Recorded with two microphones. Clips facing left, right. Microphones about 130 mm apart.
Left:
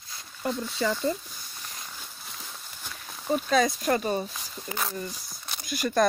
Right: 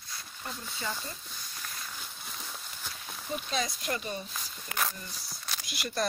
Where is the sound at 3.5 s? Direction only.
45° left (ahead or behind).